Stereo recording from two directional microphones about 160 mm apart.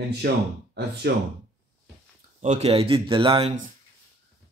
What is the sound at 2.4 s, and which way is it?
A man's voice, 45° right (ahead or behind).